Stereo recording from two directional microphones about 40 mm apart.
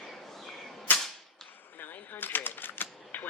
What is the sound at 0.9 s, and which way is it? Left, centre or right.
Whip, left.